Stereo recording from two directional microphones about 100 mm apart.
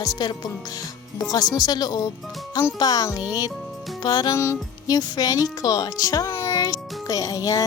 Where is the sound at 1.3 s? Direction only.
40° left (ahead or behind).